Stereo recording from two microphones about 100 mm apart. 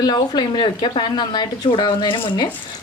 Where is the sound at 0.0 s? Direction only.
45° left (ahead or behind).